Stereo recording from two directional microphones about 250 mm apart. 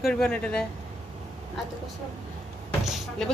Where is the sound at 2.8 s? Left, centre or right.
Centre.